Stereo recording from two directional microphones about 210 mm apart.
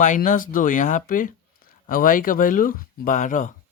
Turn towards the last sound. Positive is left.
turn(degrees=35)  # may be behind; listen again after turning